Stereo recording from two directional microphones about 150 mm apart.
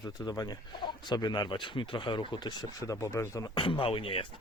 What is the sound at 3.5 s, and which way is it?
Speech, 35° left (ahead or behind).